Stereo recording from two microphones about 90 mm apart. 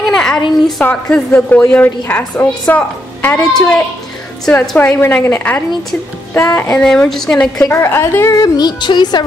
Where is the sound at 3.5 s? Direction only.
10° left (ahead or behind).